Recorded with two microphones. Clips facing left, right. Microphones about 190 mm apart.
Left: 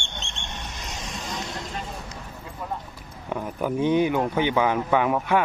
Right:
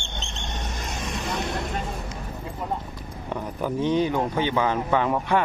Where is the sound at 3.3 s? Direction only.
10° left (ahead or behind).